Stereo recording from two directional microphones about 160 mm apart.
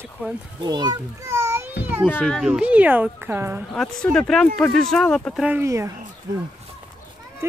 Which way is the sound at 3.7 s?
5° left (ahead or behind).